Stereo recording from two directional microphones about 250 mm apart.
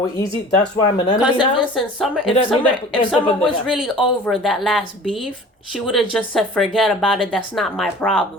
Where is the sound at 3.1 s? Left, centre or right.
Centre.